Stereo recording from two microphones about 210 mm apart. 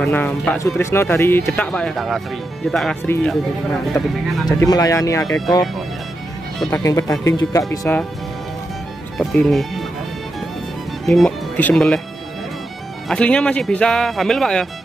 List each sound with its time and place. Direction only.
0.0 s speech: 5° left (ahead or behind)
4.5 s speech: 20° left (ahead or behind)
6.7 s speech: 15° left (ahead or behind)
9.2 s speech: centre (ahead or behind)
11.1 s speech: 5° left (ahead or behind)
13.1 s speech: 5° left (ahead or behind)